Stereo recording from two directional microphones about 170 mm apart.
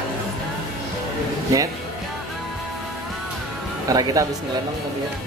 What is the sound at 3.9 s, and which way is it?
Speech, 20° right (ahead or behind).